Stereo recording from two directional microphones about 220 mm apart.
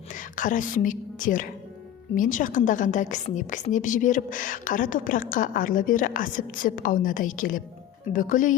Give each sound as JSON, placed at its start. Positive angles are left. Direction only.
{"t": 0.1, "sound": "a woman's voice", "side_deg": 35}